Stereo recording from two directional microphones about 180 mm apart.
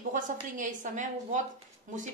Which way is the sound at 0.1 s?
45° right (ahead or behind).